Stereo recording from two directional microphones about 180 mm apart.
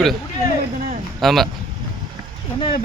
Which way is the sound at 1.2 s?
Centre (ahead or behind).